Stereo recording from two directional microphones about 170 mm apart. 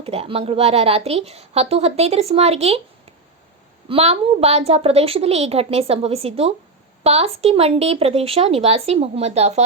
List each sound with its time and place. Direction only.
0.0 s a woman's voice: 35° right (ahead or behind)
3.8 s a woman's voice: 35° right (ahead or behind)